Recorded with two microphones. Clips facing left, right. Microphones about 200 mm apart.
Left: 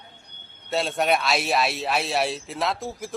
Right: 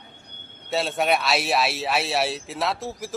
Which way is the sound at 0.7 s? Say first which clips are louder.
Even; centre (ahead or behind).